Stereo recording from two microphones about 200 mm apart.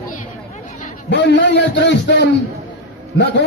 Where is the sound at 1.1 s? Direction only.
60° left (ahead or behind).